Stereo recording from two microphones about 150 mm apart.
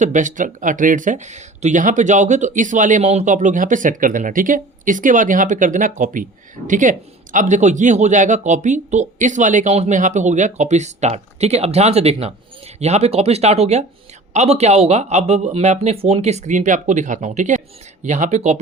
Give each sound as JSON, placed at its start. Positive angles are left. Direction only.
{"t": 0.0, "sound": "speech", "side_deg": -55}